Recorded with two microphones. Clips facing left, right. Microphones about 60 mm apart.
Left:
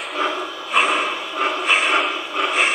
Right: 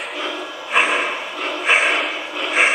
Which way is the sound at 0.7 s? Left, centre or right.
Centre.